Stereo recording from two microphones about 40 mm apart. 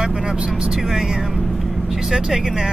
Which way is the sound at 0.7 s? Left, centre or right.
Centre.